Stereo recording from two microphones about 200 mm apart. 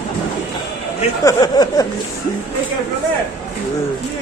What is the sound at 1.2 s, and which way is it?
Speech, 20° left (ahead or behind).